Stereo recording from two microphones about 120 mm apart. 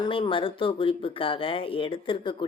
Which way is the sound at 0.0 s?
45° left (ahead or behind).